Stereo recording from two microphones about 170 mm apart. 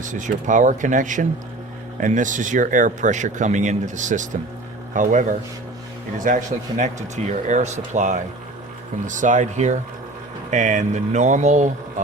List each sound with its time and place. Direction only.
0.0 s speech: 45° right (ahead or behind)